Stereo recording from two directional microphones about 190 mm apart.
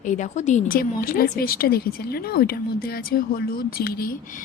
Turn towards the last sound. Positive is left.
turn(degrees=50)  # may be behind; listen again after turning